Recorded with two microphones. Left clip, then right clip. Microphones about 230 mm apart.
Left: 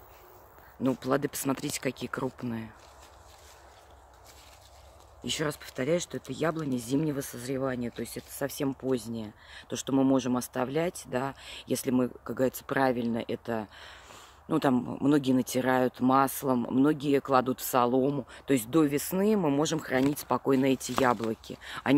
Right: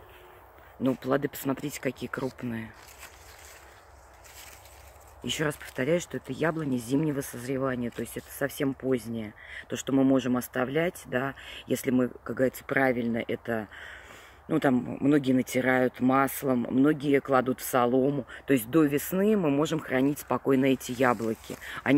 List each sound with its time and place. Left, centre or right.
0.8 s speech: centre
5.2 s speech: centre
15.1 s speech: centre